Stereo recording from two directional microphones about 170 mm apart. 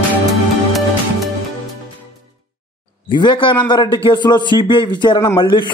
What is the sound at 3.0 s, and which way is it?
A man's voice, 30° left (ahead or behind).